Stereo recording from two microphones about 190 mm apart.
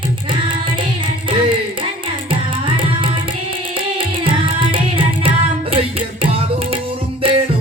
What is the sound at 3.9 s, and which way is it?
Music, 25° right (ahead or behind).